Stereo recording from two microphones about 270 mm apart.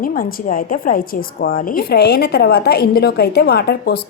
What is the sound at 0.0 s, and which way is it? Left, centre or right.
Speech, left.